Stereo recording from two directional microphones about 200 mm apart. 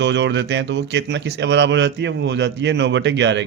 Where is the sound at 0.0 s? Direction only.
60° right (ahead or behind).